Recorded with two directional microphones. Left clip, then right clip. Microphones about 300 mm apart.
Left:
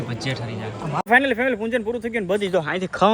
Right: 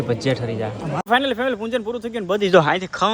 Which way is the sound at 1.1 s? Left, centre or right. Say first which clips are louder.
Left 1 dB; centre.